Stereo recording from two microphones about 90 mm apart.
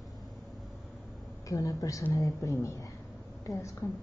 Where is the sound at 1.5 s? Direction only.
40° left (ahead or behind).